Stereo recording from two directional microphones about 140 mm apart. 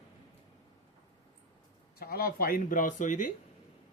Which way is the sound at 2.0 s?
90° left.